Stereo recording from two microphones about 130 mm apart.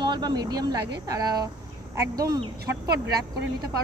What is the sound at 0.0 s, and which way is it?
Speech, 35° right (ahead or behind).